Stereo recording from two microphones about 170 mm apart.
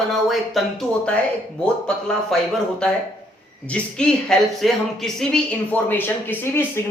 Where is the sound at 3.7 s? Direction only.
5° left (ahead or behind).